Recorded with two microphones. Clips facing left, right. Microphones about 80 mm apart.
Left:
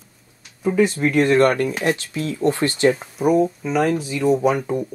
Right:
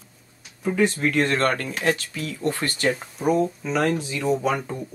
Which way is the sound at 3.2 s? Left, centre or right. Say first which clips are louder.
Left 4 dB; centre.